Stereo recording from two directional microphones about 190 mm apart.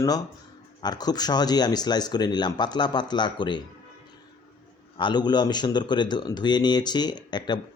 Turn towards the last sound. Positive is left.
turn(degrees=20)  # may be behind; listen again after turning